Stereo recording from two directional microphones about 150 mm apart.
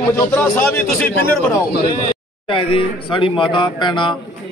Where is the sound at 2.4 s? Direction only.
35° left (ahead or behind).